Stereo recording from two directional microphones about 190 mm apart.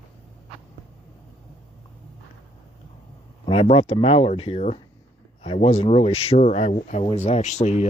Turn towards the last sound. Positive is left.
turn(degrees=35)  # may be behind; listen again after turning